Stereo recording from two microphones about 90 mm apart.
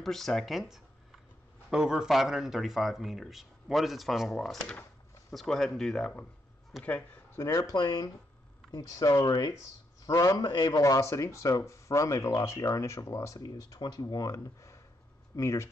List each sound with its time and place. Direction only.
0.0 s speech: 5° left (ahead or behind)
7.3 s speech: 40° left (ahead or behind)
7.7 s speech: 50° left (ahead or behind)
8.7 s speech: 40° left (ahead or behind)
10.8 s speech: 35° left (ahead or behind)
13.4 s speech: 45° left (ahead or behind)